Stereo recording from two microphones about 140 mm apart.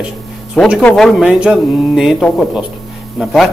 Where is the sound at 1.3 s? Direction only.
5° right (ahead or behind).